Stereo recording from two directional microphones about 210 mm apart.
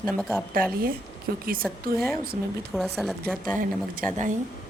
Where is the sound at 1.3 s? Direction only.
45° right (ahead or behind).